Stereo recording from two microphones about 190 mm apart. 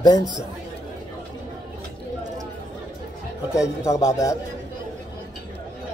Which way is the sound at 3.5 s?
15° left (ahead or behind).